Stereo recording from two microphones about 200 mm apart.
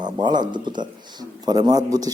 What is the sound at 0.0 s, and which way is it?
Speech, 20° right (ahead or behind).